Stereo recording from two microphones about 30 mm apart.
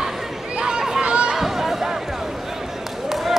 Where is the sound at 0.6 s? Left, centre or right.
Right.